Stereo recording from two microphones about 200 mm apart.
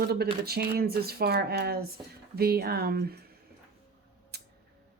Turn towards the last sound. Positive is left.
turn(degrees=-55)  # may be behind; listen again after turning